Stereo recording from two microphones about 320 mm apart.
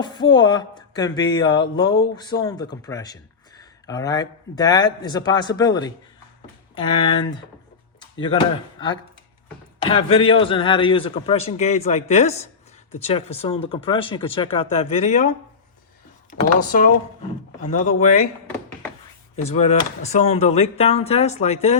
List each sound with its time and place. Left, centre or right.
0.0 s a man's voice: centre
9.8 s a man's voice: centre
16.3 s speech: left
19.4 s speech: left